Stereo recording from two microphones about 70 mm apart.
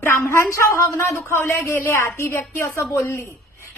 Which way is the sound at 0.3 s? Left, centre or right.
Left.